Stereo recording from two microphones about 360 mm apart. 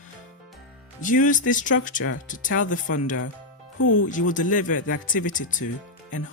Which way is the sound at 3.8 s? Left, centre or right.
Left.